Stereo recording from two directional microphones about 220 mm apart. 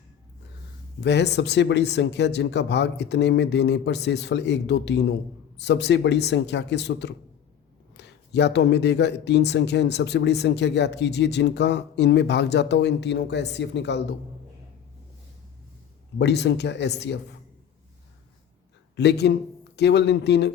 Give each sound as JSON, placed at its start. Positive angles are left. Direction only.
{"t": 1.0, "sound": "speech", "side_deg": 50}
{"t": 16.1, "sound": "speech", "side_deg": 50}
{"t": 18.9, "sound": "speech", "side_deg": 50}